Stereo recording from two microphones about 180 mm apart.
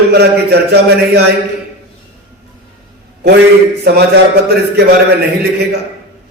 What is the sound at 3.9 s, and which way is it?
Speech, 60° right (ahead or behind).